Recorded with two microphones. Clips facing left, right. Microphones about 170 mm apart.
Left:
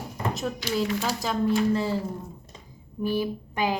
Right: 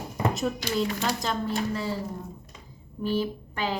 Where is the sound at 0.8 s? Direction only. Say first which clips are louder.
Left 1 dB; 5° left (ahead or behind).